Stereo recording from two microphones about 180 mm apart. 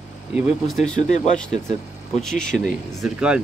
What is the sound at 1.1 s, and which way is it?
Speech, 40° left (ahead or behind).